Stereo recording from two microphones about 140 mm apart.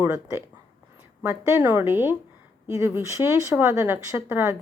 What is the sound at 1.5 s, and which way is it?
Speech, 15° right (ahead or behind).